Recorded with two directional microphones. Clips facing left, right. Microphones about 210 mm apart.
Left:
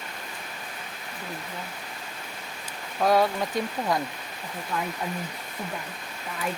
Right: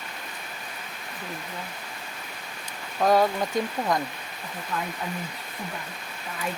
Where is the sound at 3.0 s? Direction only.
Centre (ahead or behind).